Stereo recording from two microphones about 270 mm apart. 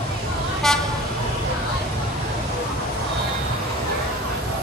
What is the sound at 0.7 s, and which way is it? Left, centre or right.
Vehicle, centre.